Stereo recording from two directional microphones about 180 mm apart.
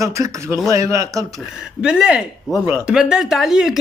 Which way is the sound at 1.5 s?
5° right (ahead or behind).